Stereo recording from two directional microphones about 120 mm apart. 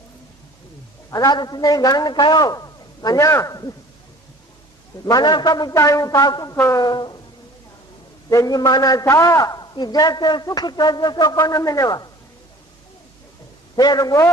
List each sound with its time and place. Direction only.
1.1 s a man's voice: 35° left (ahead or behind)
5.0 s a man's voice: 35° left (ahead or behind)
6.8 s a man's voice: 35° left (ahead or behind)
8.3 s a man's voice: 30° left (ahead or behind)
13.7 s a man's voice: 35° left (ahead or behind)